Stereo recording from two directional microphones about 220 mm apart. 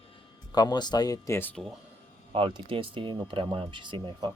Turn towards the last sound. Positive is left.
turn(degrees=-20)  # may be behind; listen again after turning